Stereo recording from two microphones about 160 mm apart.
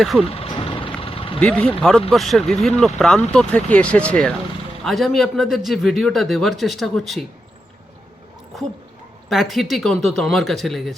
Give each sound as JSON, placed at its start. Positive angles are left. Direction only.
{"t": 0.0, "sound": "a man's voice", "side_deg": 0}
{"t": 0.3, "sound": "vehicle", "side_deg": 35}
{"t": 1.4, "sound": "a man's voice", "side_deg": 10}
{"t": 9.3, "sound": "a man's voice", "side_deg": 0}